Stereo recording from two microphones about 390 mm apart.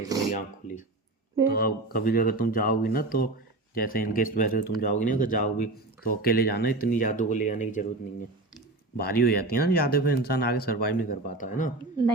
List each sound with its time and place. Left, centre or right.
0.3 s speech: centre
9.0 s speech: left